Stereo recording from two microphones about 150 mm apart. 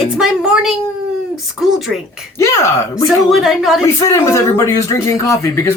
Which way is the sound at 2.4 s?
20° left (ahead or behind).